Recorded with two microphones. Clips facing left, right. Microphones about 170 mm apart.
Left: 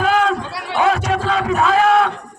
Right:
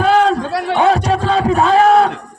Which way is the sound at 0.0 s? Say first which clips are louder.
Right 4 dB; 35° right (ahead or behind).